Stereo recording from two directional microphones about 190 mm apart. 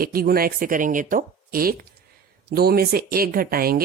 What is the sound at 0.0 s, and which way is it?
Speech, 50° right (ahead or behind).